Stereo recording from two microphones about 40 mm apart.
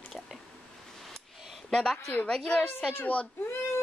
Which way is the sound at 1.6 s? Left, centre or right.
Centre.